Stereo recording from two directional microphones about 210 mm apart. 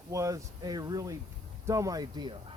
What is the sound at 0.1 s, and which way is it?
Speech, 15° right (ahead or behind).